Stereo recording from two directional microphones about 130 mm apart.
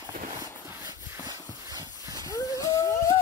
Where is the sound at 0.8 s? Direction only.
30° right (ahead or behind).